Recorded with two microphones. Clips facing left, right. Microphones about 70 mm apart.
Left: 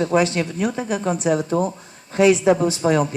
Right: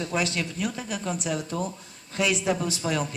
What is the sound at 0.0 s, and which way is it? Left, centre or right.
Speech, left.